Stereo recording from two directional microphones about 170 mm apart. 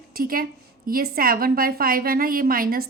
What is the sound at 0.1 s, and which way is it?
A woman's voice, 60° right (ahead or behind).